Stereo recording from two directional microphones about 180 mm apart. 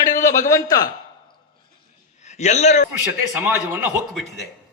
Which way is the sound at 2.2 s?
40° left (ahead or behind).